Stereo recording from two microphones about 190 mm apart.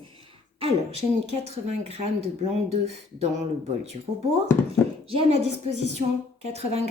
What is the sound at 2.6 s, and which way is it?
Speech, 35° right (ahead or behind).